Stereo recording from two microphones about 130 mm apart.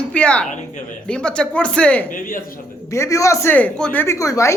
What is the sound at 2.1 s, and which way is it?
Speech, 90° left.